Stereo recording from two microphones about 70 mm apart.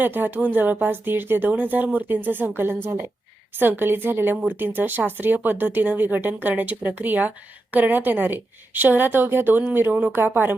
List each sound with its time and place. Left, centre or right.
0.0 s speech: right
3.6 s a woman's voice: right